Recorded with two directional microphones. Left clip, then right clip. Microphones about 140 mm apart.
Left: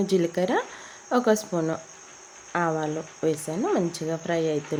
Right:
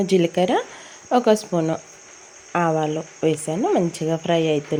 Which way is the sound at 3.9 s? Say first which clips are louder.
Right 6 dB; 25° right (ahead or behind).